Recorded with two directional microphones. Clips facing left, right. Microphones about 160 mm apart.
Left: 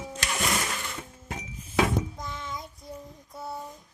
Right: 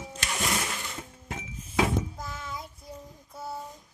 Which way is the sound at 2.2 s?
5° right (ahead or behind).